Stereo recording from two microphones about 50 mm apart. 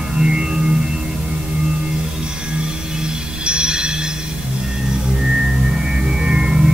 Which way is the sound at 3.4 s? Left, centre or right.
Centre.